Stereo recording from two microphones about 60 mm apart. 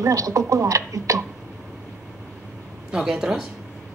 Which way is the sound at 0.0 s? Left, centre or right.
Right.